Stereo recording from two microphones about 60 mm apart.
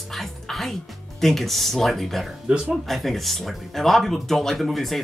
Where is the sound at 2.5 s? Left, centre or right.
Right.